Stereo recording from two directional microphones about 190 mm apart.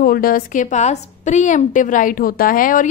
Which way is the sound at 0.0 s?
50° left (ahead or behind).